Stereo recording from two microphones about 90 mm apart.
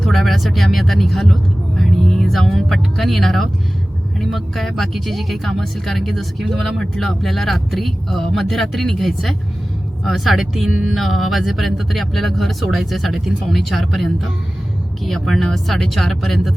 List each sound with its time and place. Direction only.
0.0 s speech: centre (ahead or behind)